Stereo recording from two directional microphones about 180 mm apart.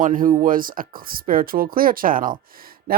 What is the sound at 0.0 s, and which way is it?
Speech, 50° right (ahead or behind).